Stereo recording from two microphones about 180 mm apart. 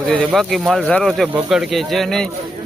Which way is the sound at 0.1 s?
Centre (ahead or behind).